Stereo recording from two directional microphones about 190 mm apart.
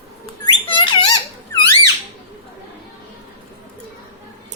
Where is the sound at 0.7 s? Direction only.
25° left (ahead or behind).